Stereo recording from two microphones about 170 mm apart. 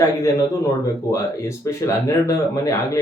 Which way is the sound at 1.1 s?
15° left (ahead or behind).